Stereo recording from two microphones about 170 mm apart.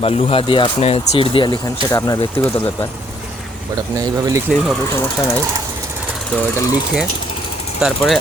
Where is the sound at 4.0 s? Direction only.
20° right (ahead or behind).